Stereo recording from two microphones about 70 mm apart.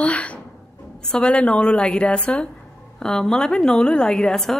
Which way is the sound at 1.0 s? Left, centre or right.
Centre.